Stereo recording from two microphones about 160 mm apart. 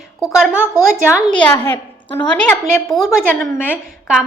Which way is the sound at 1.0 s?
10° left (ahead or behind).